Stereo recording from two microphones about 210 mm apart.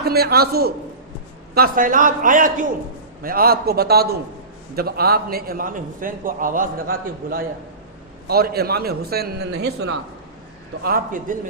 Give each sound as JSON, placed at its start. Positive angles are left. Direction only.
{"t": 0.0, "sound": "a man's voice", "side_deg": -50}
{"t": 10.8, "sound": "a man's voice", "side_deg": -40}